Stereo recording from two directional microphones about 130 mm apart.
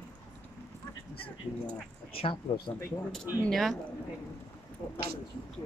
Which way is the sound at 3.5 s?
Centre (ahead or behind).